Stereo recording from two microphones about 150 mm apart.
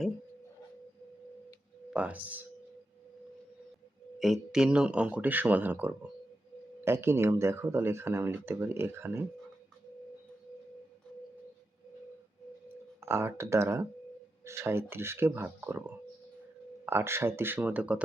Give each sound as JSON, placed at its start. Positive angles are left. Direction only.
{"t": 1.9, "sound": "speech", "side_deg": -10}
{"t": 4.2, "sound": "speech", "side_deg": -5}
{"t": 13.1, "sound": "speech", "side_deg": -15}
{"t": 16.8, "sound": "speech", "side_deg": -15}